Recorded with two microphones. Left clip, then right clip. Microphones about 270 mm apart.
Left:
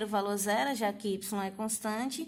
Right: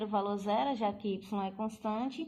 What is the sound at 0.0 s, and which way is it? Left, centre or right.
Speech, left.